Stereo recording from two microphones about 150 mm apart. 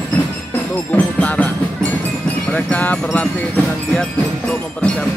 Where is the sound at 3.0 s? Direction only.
10° left (ahead or behind).